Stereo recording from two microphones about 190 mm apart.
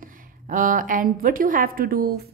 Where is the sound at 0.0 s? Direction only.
45° right (ahead or behind).